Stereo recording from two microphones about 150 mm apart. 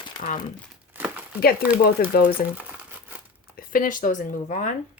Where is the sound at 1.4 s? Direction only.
90° left.